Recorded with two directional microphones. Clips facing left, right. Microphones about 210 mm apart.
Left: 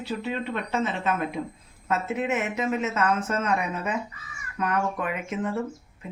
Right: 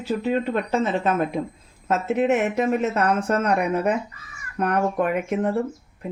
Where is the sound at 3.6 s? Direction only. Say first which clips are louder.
Right 7 dB; 60° right (ahead or behind).